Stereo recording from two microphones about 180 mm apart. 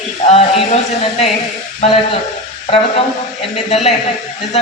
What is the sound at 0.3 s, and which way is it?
Speech, 35° left (ahead or behind).